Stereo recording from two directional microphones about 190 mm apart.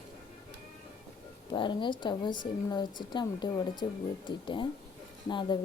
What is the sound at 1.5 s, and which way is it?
Speech, 25° left (ahead or behind).